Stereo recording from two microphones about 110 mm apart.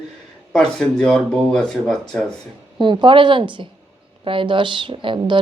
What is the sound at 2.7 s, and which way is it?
A woman's voice, 45° right (ahead or behind).